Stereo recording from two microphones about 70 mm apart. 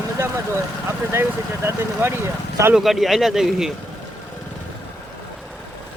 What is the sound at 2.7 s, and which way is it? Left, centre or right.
Speech, centre.